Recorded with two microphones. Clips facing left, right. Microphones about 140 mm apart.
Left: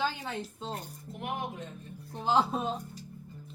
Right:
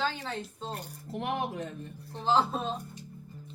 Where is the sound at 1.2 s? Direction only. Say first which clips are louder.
Right 4 dB; 85° right.